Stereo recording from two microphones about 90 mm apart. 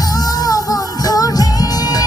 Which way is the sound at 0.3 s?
45° left (ahead or behind).